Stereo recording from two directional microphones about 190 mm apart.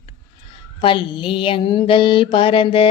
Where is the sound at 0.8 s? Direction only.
25° left (ahead or behind).